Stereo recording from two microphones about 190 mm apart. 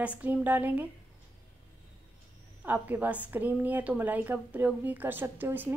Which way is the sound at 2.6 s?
10° right (ahead or behind).